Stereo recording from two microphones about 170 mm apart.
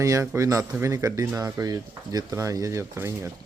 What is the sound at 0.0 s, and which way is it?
Speech, 20° right (ahead or behind).